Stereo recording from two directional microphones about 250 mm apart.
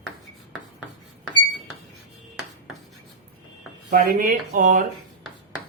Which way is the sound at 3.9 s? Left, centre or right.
Right.